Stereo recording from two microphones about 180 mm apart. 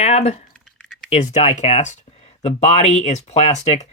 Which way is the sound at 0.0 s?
35° left (ahead or behind).